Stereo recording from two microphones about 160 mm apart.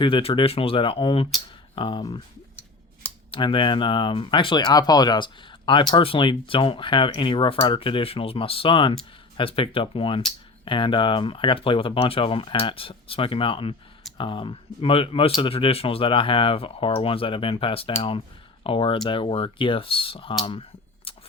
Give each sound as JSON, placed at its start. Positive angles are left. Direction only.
{"t": 0.0, "sound": "speech", "side_deg": 35}
{"t": 3.3, "sound": "speech", "side_deg": 30}
{"t": 20.4, "sound": "a sound", "side_deg": 35}